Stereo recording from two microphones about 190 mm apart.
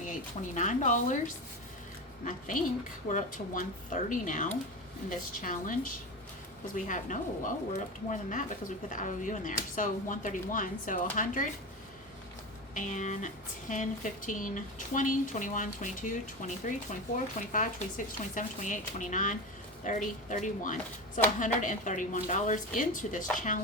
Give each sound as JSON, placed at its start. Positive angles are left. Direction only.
{"t": 0.5, "sound": "speech", "side_deg": 40}
{"t": 3.1, "sound": "speech", "side_deg": 40}
{"t": 12.7, "sound": "speech", "side_deg": 40}